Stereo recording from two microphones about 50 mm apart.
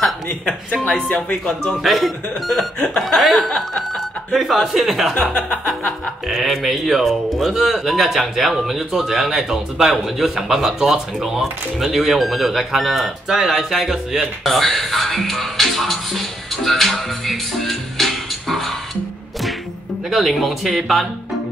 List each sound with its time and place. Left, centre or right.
0.8 s music: left
1.7 s speech: centre
3.3 s speech: centre
5.2 s music: left
6.2 s speech: centre
20.1 s speech: centre